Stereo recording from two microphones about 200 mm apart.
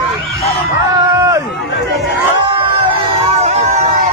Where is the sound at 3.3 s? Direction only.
30° right (ahead or behind).